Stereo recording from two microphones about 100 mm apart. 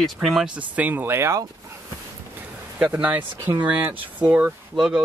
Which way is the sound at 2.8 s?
15° right (ahead or behind).